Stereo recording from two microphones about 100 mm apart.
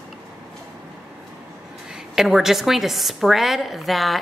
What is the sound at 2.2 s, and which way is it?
A woman's voice, 5° right (ahead or behind).